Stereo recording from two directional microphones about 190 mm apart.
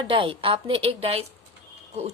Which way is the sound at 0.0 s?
25° right (ahead or behind).